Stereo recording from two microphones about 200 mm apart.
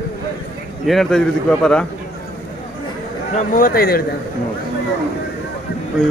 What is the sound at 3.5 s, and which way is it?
Speech, 45° left (ahead or behind).